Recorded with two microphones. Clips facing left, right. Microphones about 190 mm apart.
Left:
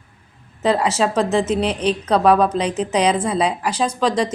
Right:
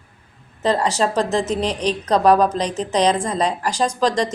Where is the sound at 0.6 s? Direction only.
5° left (ahead or behind).